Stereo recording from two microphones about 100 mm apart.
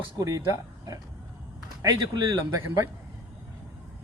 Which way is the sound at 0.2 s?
35° right (ahead or behind).